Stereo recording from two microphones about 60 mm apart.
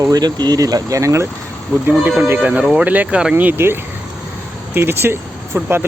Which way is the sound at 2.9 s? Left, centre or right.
Right.